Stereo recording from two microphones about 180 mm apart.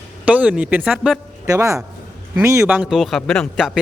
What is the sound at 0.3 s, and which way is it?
Speech, 5° right (ahead or behind).